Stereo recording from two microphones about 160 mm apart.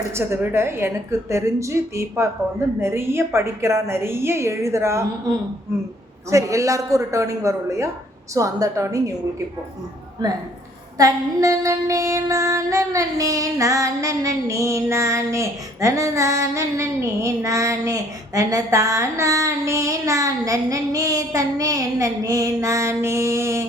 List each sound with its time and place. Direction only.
0.1 s a woman's voice: 15° right (ahead or behind)
6.3 s female singing: 20° right (ahead or behind)
10.9 s female singing: 20° right (ahead or behind)